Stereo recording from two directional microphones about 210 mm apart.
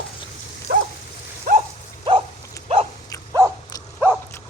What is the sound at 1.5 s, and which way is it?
Dog, 45° right (ahead or behind).